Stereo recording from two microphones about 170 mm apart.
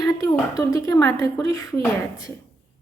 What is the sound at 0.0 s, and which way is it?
A woman's voice, 20° left (ahead or behind).